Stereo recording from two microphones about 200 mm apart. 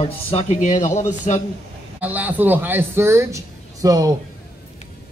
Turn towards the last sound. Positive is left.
turn(degrees=-15)  # may be behind; listen again after turning